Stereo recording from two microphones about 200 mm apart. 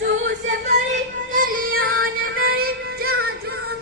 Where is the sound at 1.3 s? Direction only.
45° right (ahead or behind).